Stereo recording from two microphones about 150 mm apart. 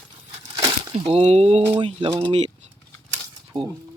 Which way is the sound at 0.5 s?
30° right (ahead or behind).